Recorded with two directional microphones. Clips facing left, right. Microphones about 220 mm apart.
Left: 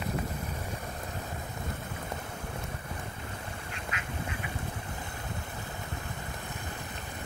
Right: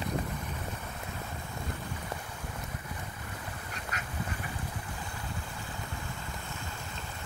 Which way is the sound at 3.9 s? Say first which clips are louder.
Right 1 dB; 40° right (ahead or behind).